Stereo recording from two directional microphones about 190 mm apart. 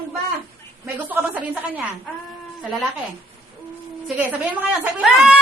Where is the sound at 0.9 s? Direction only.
10° right (ahead or behind).